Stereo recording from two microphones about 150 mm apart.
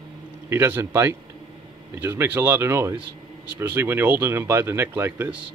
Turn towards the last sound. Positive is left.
turn(degrees=-15)  # may be behind; listen again after turning